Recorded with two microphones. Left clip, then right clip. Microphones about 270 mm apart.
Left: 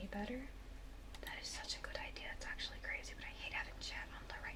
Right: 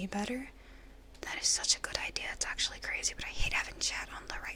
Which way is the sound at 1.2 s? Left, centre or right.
Right.